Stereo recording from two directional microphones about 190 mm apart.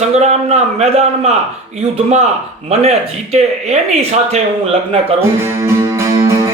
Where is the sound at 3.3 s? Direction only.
35° right (ahead or behind).